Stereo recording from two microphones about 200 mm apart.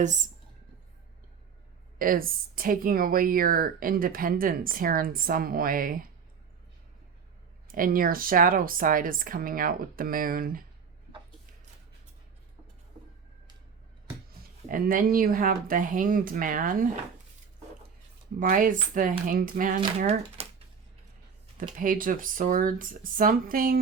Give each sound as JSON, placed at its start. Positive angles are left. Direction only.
{"t": 0.0, "sound": "speech", "side_deg": -40}
{"t": 2.0, "sound": "speech", "side_deg": -45}
{"t": 7.7, "sound": "speech", "side_deg": -45}
{"t": 14.7, "sound": "speech", "side_deg": -45}
{"t": 18.3, "sound": "speech", "side_deg": -45}
{"t": 20.0, "sound": "speech", "side_deg": -30}
{"t": 21.6, "sound": "speech", "side_deg": -45}